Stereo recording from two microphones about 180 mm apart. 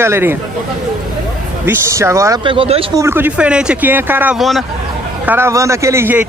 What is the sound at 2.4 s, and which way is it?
Speech, 30° right (ahead or behind).